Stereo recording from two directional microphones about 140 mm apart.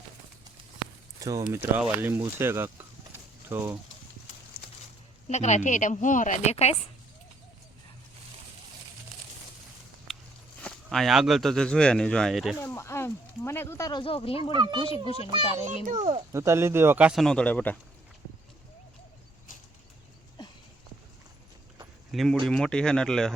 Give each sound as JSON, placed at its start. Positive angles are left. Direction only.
{"t": 1.2, "sound": "speech", "side_deg": -25}
{"t": 1.5, "sound": "speech", "side_deg": -10}
{"t": 5.3, "sound": "a woman's voice", "side_deg": 55}
{"t": 10.1, "sound": "walk", "side_deg": 0}
{"t": 10.6, "sound": "speech", "side_deg": 5}
{"t": 12.6, "sound": "speech", "side_deg": 20}
{"t": 14.0, "sound": "speech", "side_deg": 40}
{"t": 14.5, "sound": "a child's voice", "side_deg": -35}
{"t": 14.8, "sound": "a child's voice", "side_deg": 40}
{"t": 15.6, "sound": "a child's voice", "side_deg": -55}
{"t": 16.3, "sound": "speech", "side_deg": -20}
{"t": 22.1, "sound": "speech", "side_deg": 0}